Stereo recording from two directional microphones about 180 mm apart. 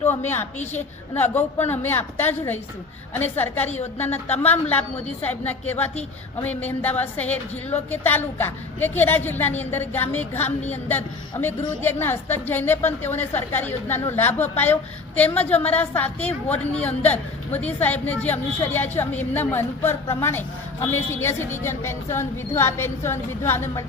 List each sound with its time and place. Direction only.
0.1 s a woman's voice: 10° left (ahead or behind)
0.6 s a woman's voice: 40° left (ahead or behind)
1.1 s a woman's voice: 10° left (ahead or behind)